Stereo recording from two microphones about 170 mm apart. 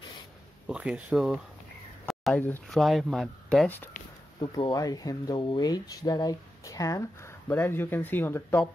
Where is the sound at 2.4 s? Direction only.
10° left (ahead or behind).